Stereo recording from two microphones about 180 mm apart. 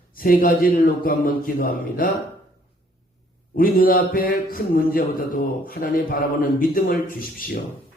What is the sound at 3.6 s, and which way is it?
Speech, 55° left (ahead or behind).